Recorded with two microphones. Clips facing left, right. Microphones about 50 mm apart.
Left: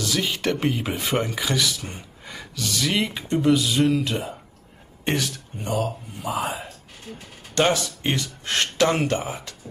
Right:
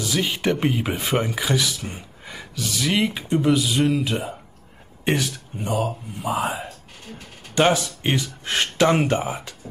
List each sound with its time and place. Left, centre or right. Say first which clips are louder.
0.0 s speech: right 1 dB; centre